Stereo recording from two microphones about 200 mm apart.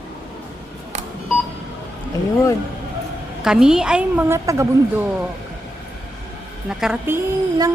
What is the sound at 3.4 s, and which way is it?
A woman's voice, 5° right (ahead or behind).